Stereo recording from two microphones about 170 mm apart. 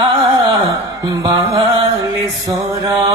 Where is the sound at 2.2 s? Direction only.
20° right (ahead or behind).